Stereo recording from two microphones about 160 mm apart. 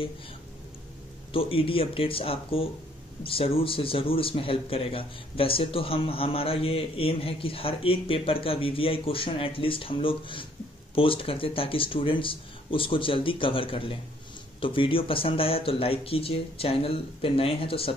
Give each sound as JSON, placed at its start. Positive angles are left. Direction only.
{"t": 1.3, "sound": "speech", "side_deg": 35}